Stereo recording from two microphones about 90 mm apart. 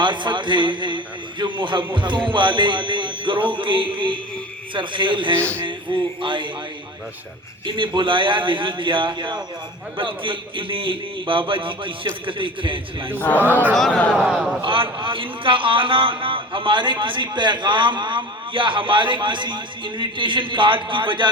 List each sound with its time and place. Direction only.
0.0 s a man's voice: 60° right (ahead or behind)
7.8 s a man's voice: 65° right (ahead or behind)
13.1 s speech: 20° left (ahead or behind)
13.7 s speech: 5° left (ahead or behind)
14.6 s a man's voice: 70° right (ahead or behind)